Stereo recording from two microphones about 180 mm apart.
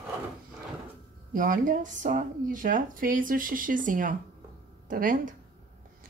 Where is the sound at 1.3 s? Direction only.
50° right (ahead or behind).